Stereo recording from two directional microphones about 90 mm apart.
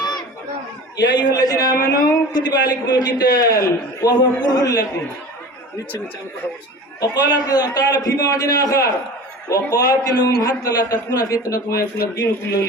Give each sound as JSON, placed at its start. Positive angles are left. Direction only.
{"t": 0.9, "sound": "a man's voice", "side_deg": 50}
{"t": 7.0, "sound": "a man's voice", "side_deg": 50}